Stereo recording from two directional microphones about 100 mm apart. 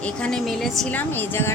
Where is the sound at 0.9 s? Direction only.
20° left (ahead or behind).